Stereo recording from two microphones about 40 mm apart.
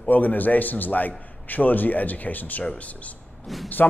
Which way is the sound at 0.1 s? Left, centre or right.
Left.